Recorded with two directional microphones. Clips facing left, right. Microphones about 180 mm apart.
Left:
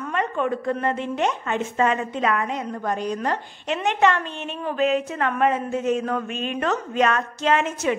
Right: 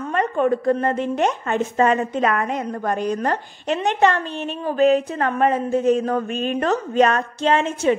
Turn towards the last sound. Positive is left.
turn(degrees=-30)  # may be behind; listen again after turning